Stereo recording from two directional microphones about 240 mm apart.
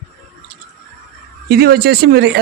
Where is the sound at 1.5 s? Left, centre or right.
Right.